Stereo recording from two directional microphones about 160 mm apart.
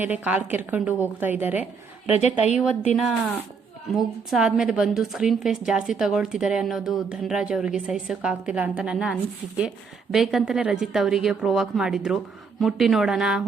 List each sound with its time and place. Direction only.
0.0 s a woman's voice: 10° right (ahead or behind)
2.1 s a woman's voice: 45° left (ahead or behind)
2.9 s a woman's voice: centre (ahead or behind)